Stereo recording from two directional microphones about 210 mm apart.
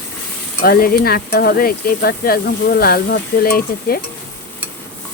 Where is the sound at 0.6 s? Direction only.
45° left (ahead or behind).